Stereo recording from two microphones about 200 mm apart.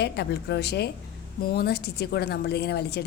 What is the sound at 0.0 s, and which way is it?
A woman's voice, 55° left (ahead or behind).